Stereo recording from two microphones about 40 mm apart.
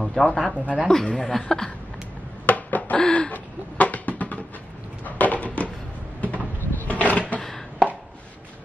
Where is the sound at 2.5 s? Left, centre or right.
Left.